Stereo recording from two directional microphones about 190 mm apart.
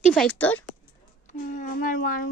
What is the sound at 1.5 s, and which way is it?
Speech, 45° left (ahead or behind).